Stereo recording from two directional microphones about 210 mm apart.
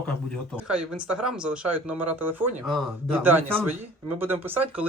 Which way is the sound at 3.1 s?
10° right (ahead or behind).